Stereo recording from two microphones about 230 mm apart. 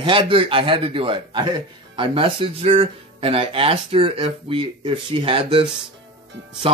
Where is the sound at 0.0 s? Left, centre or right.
Right.